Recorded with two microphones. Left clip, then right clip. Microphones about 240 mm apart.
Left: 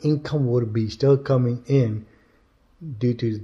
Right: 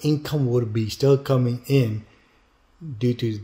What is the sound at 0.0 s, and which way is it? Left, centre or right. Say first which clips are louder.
Speech: even; centre.